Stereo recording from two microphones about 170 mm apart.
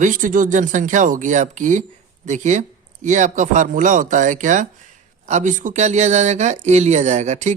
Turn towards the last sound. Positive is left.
turn(degrees=-45)  # may be behind; listen again after turning